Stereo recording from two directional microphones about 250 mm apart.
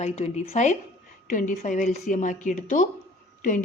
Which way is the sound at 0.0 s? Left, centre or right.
Left.